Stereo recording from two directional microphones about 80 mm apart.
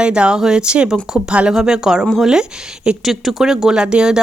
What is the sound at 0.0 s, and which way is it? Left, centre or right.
Speech, centre.